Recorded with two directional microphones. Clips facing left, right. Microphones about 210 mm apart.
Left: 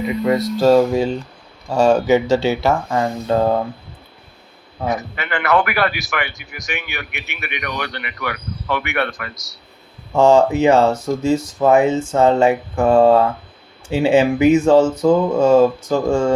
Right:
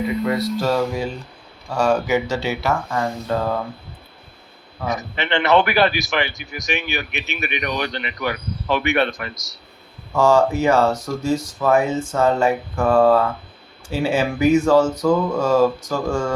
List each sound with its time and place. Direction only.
0.6 s speech: 30° left (ahead or behind)
5.1 s a man's voice: 25° right (ahead or behind)
10.1 s speech: 25° left (ahead or behind)